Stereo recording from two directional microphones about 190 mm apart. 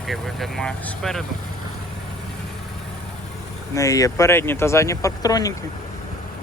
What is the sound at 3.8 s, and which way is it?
Speech, 15° left (ahead or behind).